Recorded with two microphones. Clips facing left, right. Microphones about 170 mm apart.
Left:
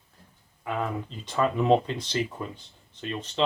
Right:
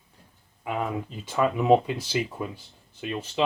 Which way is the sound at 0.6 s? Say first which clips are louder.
Right 1 dB; 15° right (ahead or behind).